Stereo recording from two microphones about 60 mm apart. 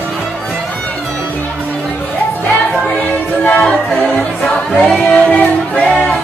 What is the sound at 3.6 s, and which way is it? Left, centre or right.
Music, centre.